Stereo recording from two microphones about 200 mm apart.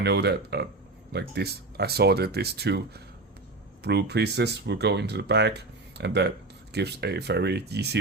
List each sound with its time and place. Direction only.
0.0 s speech: 55° right (ahead or behind)